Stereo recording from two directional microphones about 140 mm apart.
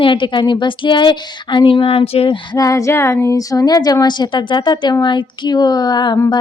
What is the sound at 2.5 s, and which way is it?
A woman's voice, 25° left (ahead or behind).